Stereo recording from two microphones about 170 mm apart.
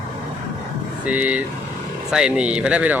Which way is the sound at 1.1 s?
10° right (ahead or behind).